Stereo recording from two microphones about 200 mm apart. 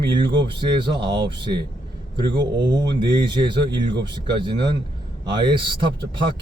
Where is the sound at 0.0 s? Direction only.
25° right (ahead or behind).